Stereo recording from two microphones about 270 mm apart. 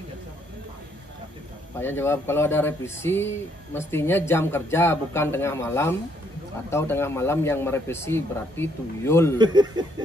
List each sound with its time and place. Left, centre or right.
1.8 s speech: centre
9.4 s speech: centre